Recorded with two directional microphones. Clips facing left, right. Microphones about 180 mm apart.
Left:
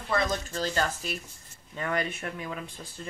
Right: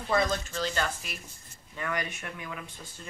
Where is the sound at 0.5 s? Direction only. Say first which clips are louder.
Left 2 dB; 40° left (ahead or behind).